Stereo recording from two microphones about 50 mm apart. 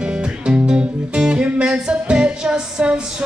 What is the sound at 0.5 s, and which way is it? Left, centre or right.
Music, centre.